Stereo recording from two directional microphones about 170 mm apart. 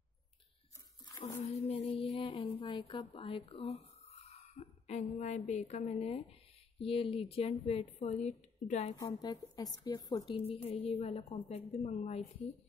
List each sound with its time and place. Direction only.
1.2 s music: 40° left (ahead or behind)
2.1 s a woman's voice: 30° left (ahead or behind)
9.0 s a woman's voice: 25° left (ahead or behind)